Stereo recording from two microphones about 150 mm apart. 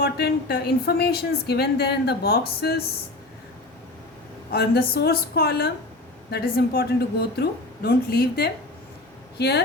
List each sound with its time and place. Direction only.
0.0 s a woman's voice: 90° left
4.5 s a woman's voice: 90° left